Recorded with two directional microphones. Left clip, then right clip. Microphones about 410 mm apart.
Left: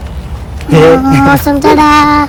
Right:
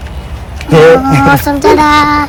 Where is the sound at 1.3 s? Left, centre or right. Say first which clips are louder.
Even; centre.